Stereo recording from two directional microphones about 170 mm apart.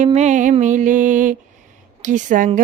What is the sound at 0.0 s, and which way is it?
Female singing, 45° right (ahead or behind).